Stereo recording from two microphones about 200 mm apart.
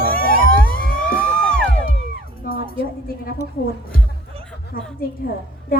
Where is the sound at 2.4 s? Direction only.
45° left (ahead or behind).